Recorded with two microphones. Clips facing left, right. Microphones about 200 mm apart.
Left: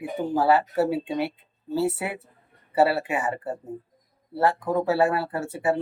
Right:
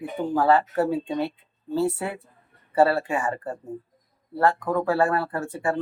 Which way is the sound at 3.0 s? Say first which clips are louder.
Right 1 dB; 20° left (ahead or behind).